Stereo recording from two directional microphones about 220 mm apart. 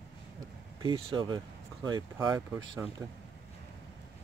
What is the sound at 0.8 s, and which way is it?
Speech, 20° right (ahead or behind).